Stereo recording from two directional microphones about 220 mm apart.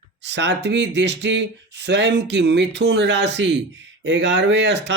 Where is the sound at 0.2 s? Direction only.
50° right (ahead or behind).